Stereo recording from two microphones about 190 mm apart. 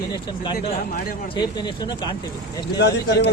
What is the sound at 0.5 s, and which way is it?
Speech, 50° left (ahead or behind).